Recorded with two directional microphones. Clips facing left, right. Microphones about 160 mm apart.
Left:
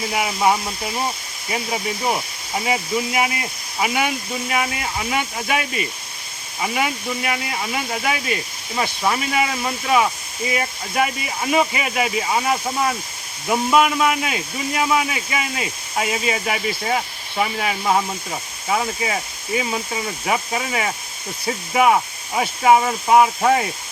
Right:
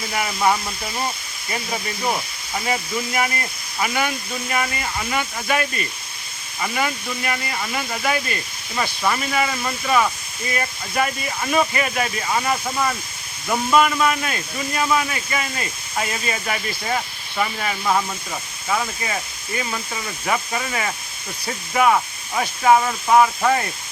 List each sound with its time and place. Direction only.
0.1 s speech: 15° left (ahead or behind)